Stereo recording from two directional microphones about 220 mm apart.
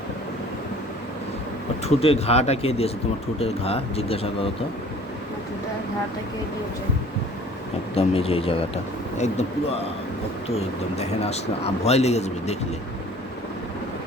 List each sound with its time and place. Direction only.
1.8 s a man's voice: 30° left (ahead or behind)
7.9 s a man's voice: 25° left (ahead or behind)